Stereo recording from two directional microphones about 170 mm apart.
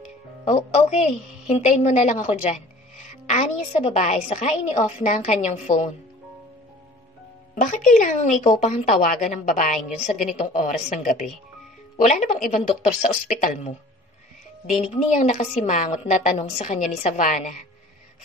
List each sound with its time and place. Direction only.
0.5 s a woman's voice: 40° left (ahead or behind)
7.6 s a woman's voice: 45° left (ahead or behind)
8.5 s a woman's voice: 35° left (ahead or behind)